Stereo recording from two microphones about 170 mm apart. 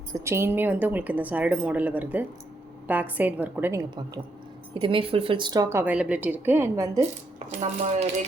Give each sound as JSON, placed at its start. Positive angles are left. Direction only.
{"t": 0.1, "sound": "a woman's voice", "side_deg": -15}
{"t": 7.3, "sound": "speech", "side_deg": -40}